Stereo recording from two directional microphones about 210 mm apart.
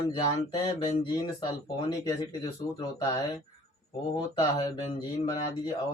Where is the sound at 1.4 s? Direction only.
20° left (ahead or behind).